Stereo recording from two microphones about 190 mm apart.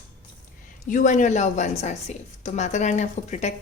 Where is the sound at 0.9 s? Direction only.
40° left (ahead or behind).